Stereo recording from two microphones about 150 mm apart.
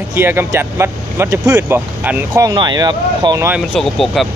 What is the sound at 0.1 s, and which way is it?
Speech, 15° right (ahead or behind).